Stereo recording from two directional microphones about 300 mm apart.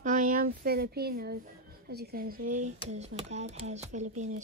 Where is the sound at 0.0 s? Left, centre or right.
Right.